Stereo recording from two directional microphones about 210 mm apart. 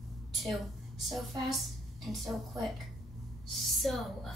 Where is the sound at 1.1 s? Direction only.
Centre (ahead or behind).